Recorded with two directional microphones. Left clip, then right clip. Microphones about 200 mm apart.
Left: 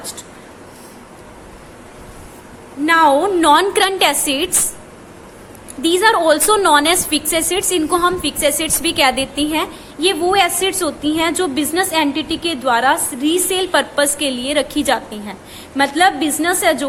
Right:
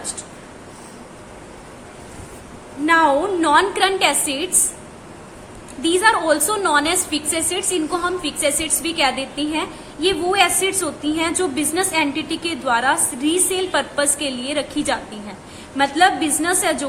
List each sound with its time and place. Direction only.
2.8 s a woman's voice: 40° left (ahead or behind)
5.8 s a woman's voice: 35° left (ahead or behind)